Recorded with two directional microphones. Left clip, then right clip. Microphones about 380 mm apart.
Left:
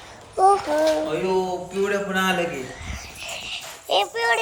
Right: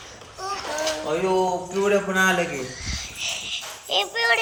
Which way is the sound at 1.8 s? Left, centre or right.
Centre.